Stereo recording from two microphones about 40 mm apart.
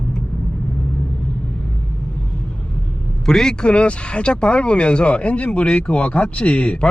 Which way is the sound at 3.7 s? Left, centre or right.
Left.